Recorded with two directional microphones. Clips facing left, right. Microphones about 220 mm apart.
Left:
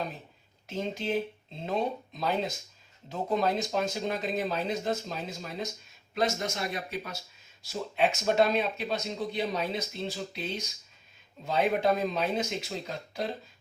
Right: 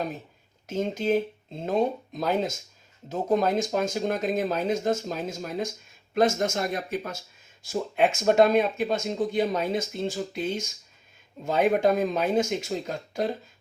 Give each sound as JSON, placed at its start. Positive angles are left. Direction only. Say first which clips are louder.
{"t": 0.7, "sound": "speech", "louder": "right 6 dB", "side_deg": -45}